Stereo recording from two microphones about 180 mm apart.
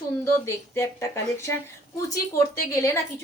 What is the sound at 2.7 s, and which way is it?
Speech, 15° left (ahead or behind).